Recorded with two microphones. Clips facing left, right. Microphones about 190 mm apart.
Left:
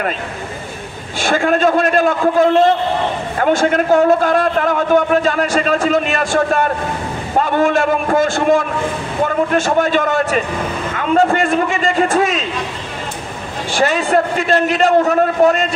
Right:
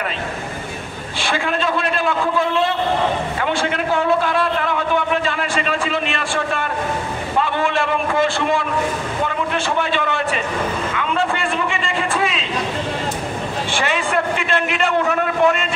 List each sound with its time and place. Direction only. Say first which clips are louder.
1.2 s a man's voice: left 7 dB; 45° left (ahead or behind)
13.7 s a man's voice: left 7 dB; 40° left (ahead or behind)